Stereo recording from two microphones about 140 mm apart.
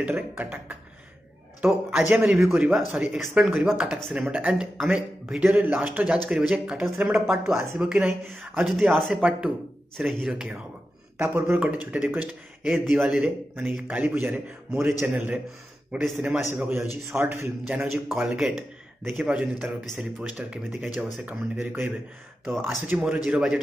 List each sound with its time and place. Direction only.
0.0 s speech: 15° right (ahead or behind)
11.1 s speech: 15° right (ahead or behind)
18.0 s speech: 5° right (ahead or behind)
22.4 s speech: centre (ahead or behind)